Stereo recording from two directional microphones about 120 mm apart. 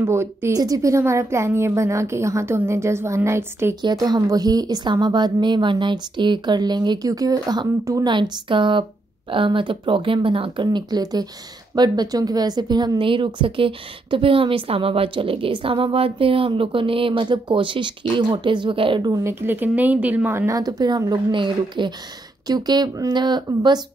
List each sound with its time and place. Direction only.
0.0 s a woman's voice: 20° right (ahead or behind)
3.8 s a woman's voice: 35° right (ahead or behind)
19.4 s a woman's voice: 15° right (ahead or behind); by 23.8 s 35° right (ahead or behind)